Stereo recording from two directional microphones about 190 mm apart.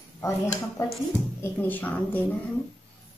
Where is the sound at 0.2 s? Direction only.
15° left (ahead or behind).